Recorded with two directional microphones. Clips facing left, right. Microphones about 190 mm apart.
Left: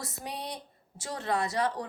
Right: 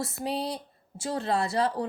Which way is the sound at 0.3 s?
30° right (ahead or behind).